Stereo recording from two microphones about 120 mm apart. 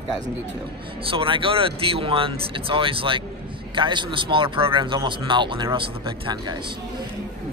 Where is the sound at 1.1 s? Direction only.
45° right (ahead or behind).